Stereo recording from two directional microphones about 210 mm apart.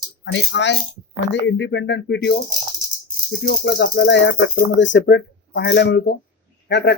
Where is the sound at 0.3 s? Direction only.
55° left (ahead or behind).